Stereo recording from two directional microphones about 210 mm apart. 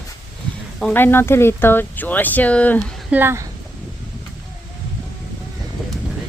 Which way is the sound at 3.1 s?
10° right (ahead or behind).